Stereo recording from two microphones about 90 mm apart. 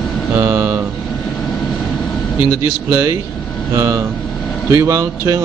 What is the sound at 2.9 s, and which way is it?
Speech, 35° right (ahead or behind).